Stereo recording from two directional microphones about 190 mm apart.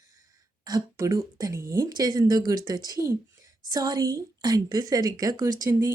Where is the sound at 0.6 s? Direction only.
20° right (ahead or behind).